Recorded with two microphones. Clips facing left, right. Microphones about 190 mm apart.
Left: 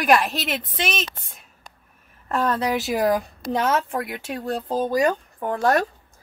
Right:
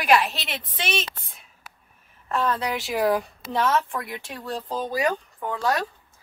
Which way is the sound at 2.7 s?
40° left (ahead or behind).